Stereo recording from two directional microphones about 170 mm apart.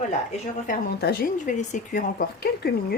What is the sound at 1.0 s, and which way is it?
Speech, 60° left (ahead or behind).